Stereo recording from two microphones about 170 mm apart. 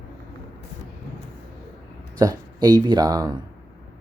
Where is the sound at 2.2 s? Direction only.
20° right (ahead or behind).